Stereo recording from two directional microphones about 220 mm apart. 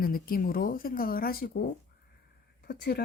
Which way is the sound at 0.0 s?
40° left (ahead or behind).